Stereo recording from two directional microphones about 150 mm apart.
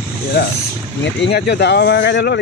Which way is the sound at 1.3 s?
90° left.